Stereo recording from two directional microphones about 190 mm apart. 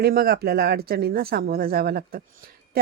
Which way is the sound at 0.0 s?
55° right (ahead or behind).